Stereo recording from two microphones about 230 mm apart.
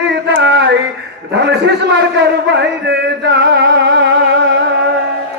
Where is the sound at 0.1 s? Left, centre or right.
Right.